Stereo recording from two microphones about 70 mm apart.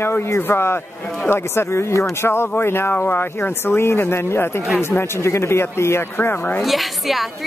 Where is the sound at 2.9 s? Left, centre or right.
Left.